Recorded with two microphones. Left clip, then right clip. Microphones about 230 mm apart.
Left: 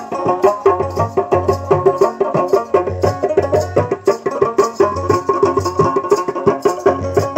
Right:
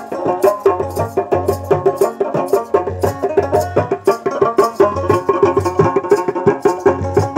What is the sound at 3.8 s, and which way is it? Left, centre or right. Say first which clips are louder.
Music: even; right.